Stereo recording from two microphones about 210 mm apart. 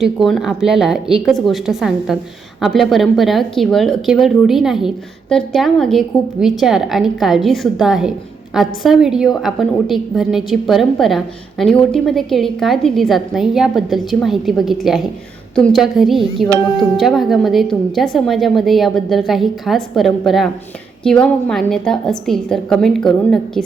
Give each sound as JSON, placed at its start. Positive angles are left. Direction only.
{"t": 0.0, "sound": "a woman's voice", "side_deg": 0}